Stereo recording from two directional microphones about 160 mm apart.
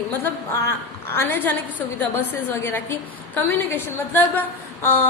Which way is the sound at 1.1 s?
15° left (ahead or behind).